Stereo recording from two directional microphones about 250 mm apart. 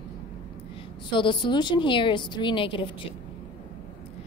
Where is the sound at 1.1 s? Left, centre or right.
Centre.